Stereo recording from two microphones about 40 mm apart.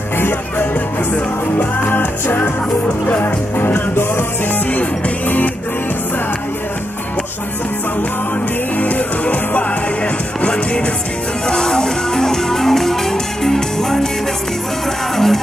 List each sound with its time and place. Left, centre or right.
1.6 s music: left
3.1 s music: left
4.7 s music: left
8.7 s music: left
10.4 s music: left
11.4 s music: centre
15.1 s music: centre